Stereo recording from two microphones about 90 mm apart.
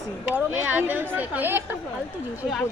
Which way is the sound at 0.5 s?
20° right (ahead or behind).